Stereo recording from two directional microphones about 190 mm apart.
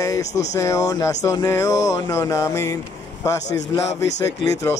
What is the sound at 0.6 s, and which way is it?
A man's voice, 15° left (ahead or behind).